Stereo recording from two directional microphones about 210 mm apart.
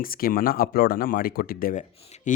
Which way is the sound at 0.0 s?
45° left (ahead or behind).